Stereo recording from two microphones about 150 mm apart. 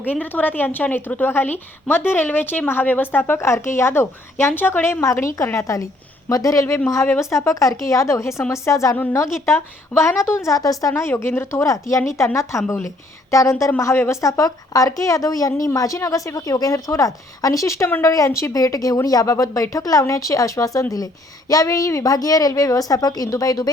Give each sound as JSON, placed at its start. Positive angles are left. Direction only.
{"t": 0.0, "sound": "a woman's voice", "side_deg": 10}